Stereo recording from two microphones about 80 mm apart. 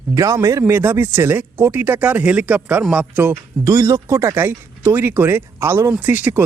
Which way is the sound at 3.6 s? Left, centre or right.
Right.